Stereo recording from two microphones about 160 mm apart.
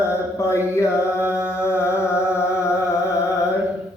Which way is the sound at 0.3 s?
20° left (ahead or behind).